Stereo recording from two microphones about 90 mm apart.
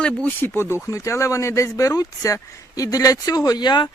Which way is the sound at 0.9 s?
35° left (ahead or behind).